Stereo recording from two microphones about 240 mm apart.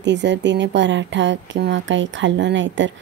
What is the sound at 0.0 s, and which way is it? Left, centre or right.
Speech, right.